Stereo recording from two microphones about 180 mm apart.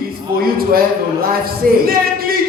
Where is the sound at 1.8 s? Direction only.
55° right (ahead or behind).